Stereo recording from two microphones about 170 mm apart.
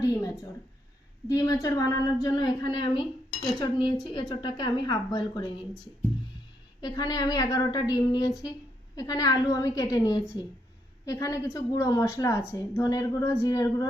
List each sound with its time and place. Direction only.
1.3 s a woman's voice: 20° left (ahead or behind)
6.8 s a woman's voice: 20° left (ahead or behind)